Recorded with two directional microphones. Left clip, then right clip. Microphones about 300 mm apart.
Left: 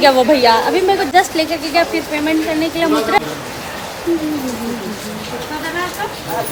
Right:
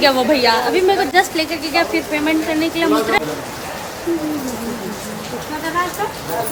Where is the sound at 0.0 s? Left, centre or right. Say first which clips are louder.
Left 3 dB; centre.